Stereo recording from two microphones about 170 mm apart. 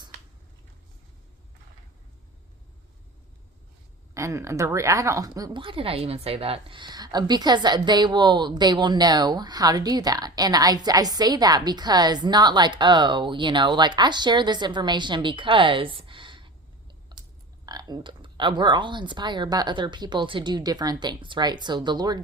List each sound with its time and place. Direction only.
4.1 s speech: 15° right (ahead or behind)
17.7 s speech: 25° right (ahead or behind)